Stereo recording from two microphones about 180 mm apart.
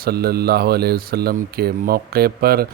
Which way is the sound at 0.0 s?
60° right (ahead or behind).